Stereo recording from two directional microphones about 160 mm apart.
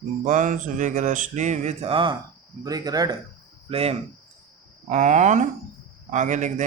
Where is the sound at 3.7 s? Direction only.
35° right (ahead or behind).